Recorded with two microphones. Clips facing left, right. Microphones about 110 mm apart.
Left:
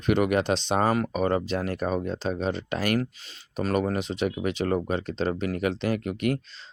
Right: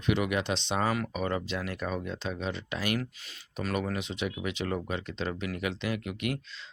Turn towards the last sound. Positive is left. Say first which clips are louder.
# left 6 dB
turn(degrees=40)  # may be behind; listen again after turning